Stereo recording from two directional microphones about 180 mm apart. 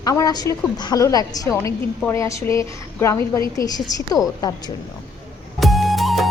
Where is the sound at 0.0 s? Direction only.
20° left (ahead or behind).